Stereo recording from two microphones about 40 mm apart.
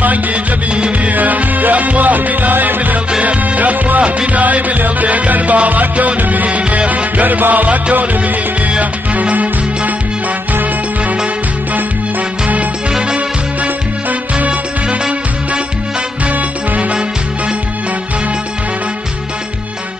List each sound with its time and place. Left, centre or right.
0.0 s music: right
0.7 s music: right
1.1 s music: right
3.1 s music: right
14.4 s music: right